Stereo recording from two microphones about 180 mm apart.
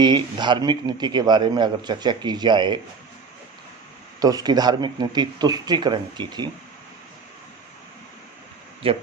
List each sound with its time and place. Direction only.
0.0 s a man's voice: 25° right (ahead or behind)
4.2 s a man's voice: 20° right (ahead or behind)
8.8 s speech: 30° right (ahead or behind)